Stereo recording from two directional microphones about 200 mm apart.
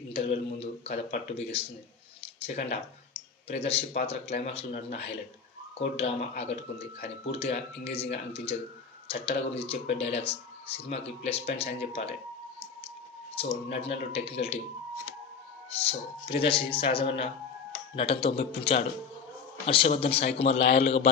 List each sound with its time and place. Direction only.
0.1 s speech: 30° left (ahead or behind)
2.2 s a sound: 30° left (ahead or behind)
3.5 s speech: 30° left (ahead or behind)
13.3 s speech: 30° left (ahead or behind)
15.8 s speech: 30° left (ahead or behind)